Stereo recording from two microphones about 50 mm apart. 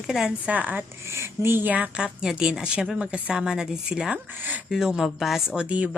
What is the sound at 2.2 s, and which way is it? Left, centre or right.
Speech, centre.